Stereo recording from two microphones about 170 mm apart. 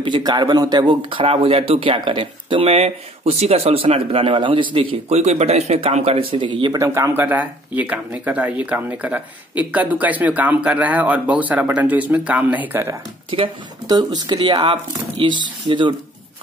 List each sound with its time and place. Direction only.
0.0 s speech: 25° right (ahead or behind)
6.8 s speech: 15° right (ahead or behind)
13.3 s speech: 30° right (ahead or behind)